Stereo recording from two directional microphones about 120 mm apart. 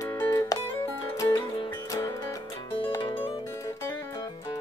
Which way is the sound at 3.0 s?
45° left (ahead or behind).